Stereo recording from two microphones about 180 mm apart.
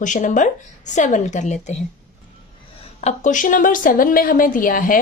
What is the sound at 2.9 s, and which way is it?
Speech, 40° left (ahead or behind).